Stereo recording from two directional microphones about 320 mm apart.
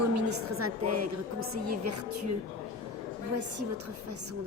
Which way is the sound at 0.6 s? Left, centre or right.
Right.